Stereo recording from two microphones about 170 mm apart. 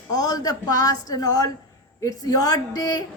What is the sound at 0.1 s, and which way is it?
Speech, 20° left (ahead or behind).